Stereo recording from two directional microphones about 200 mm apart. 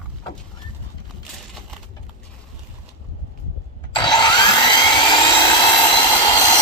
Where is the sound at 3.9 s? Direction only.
20° left (ahead or behind).